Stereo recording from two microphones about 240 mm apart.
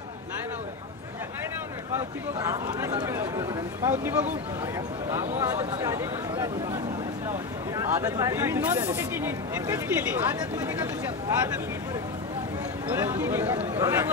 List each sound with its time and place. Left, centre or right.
2.0 s speech: centre
5.2 s a man's voice: right
5.8 s speech: centre
12.8 s speech: centre